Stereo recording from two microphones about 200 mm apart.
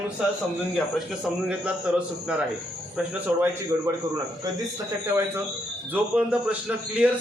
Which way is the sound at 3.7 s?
15° right (ahead or behind).